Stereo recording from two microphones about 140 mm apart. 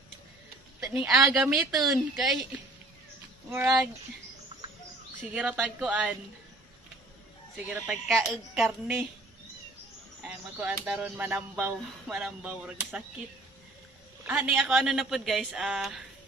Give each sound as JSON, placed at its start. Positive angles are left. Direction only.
{"t": 0.9, "sound": "speech", "side_deg": -5}
{"t": 3.4, "sound": "speech", "side_deg": -15}
{"t": 4.5, "sound": "bird", "side_deg": -35}
{"t": 5.3, "sound": "speech", "side_deg": -10}
{"t": 7.8, "sound": "speech", "side_deg": 0}
{"t": 10.2, "sound": "speech", "side_deg": -10}
{"t": 14.2, "sound": "speech", "side_deg": -15}